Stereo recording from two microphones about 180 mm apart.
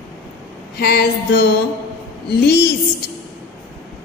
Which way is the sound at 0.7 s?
65° left (ahead or behind).